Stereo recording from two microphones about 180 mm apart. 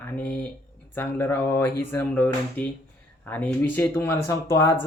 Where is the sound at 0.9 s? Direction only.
10° left (ahead or behind).